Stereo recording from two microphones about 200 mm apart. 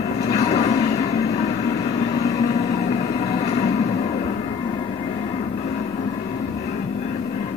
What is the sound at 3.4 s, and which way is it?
Music, 30° left (ahead or behind).